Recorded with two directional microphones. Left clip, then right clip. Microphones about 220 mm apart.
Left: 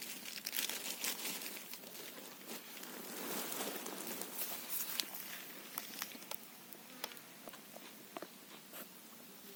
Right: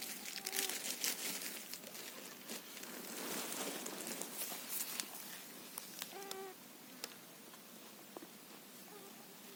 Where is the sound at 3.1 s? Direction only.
20° left (ahead or behind).